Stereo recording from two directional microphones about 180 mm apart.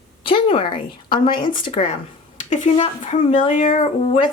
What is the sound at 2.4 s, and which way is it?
A woman's voice, 40° left (ahead or behind).